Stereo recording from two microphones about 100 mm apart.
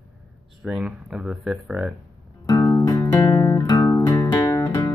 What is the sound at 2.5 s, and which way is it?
Music, 30° left (ahead or behind).